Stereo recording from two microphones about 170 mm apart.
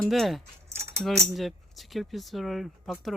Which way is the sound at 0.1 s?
Centre (ahead or behind).